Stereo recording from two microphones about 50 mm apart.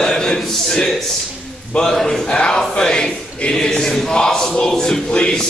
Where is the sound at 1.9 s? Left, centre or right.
Centre.